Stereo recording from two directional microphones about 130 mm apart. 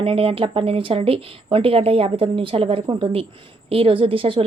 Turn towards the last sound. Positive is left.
turn(degrees=-45)  # may be behind; listen again after turning